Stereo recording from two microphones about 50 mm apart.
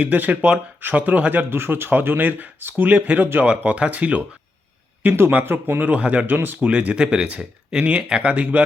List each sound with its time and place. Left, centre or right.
0.0 s speech: right
1.5 s speech: right
5.0 s speech: right
5.8 s speech: right
6.2 s speech: right
6.6 s speech: right